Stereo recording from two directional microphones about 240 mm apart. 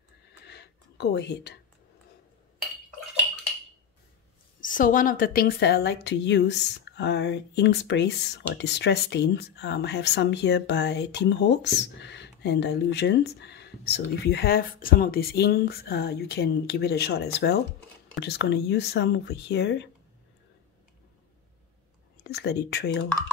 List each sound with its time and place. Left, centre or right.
0.5 s a sound: left
4.6 s a woman's voice: left
22.3 s a woman's voice: left